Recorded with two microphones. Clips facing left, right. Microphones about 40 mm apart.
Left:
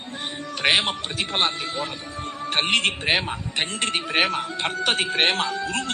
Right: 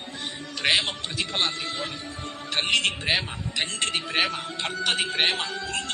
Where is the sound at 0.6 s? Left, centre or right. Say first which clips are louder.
Left 3 dB; left.